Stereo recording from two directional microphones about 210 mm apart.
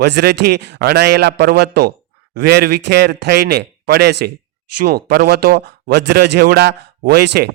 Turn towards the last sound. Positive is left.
turn(degrees=-50)  # may be behind; listen again after turning